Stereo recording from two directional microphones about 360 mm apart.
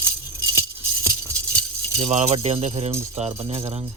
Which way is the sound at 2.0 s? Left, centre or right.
Centre.